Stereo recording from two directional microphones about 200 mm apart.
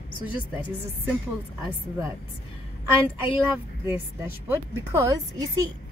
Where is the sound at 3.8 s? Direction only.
10° right (ahead or behind).